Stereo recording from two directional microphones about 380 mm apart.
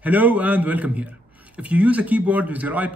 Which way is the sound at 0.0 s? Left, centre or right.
Centre.